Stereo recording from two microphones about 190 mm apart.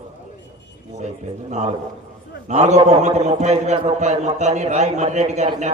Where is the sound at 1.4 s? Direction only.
35° right (ahead or behind).